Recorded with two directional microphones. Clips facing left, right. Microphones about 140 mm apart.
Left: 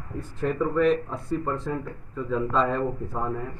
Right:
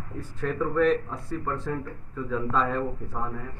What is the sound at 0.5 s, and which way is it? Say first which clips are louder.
Speech: left 1 dB; 10° left (ahead or behind).